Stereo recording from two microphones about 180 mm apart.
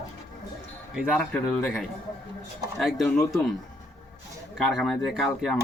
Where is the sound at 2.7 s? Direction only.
Centre (ahead or behind).